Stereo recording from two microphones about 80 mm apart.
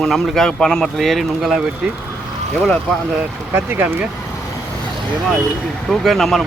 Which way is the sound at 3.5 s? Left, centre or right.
Right.